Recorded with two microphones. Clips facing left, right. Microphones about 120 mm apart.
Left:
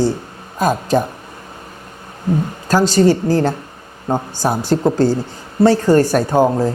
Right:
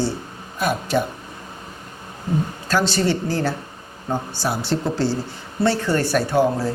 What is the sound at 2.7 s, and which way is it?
A woman's voice, 40° left (ahead or behind).